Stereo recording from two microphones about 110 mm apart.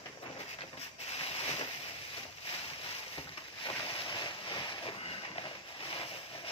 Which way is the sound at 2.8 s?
55° left (ahead or behind).